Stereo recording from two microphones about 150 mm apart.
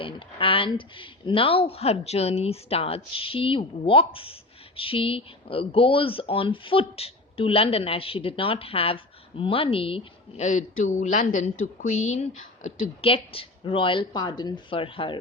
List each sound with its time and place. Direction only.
0.0 s a woman's voice: 35° left (ahead or behind)
10.4 s a woman's voice: 55° left (ahead or behind)
13.0 s a woman's voice: 40° left (ahead or behind)